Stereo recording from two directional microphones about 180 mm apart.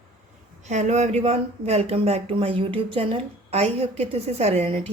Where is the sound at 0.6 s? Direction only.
40° right (ahead or behind).